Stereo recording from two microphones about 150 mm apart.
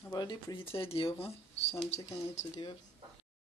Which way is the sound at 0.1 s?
25° left (ahead or behind).